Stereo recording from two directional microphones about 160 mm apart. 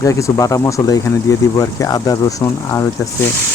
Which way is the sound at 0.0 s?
20° left (ahead or behind).